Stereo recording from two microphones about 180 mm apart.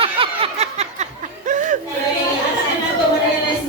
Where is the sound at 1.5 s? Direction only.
45° right (ahead or behind).